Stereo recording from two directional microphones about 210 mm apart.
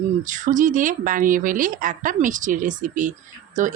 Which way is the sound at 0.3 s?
35° right (ahead or behind).